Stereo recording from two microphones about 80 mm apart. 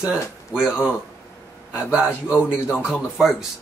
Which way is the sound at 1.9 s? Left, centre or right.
Centre.